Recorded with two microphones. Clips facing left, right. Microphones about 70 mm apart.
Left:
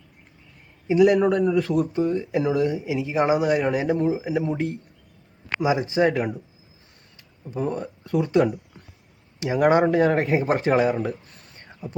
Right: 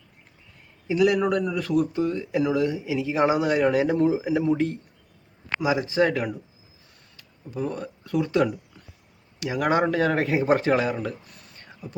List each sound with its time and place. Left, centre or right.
0.9 s speech: left; by 10.6 s centre
10.6 s speech: centre